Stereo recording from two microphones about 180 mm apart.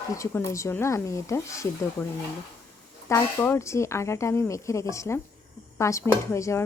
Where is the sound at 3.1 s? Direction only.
15° left (ahead or behind).